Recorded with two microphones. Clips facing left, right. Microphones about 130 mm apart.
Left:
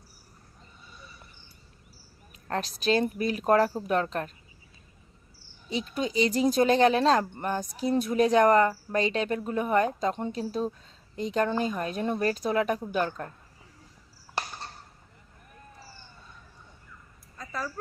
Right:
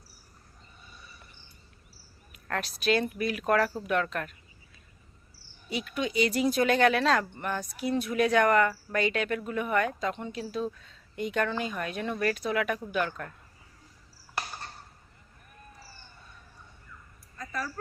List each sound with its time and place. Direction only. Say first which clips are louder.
2.3 s speech: left 2 dB; 30° left (ahead or behind)
5.6 s speech: left 2 dB; 30° left (ahead or behind)